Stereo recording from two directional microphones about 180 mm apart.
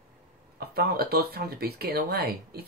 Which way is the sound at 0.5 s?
60° right (ahead or behind).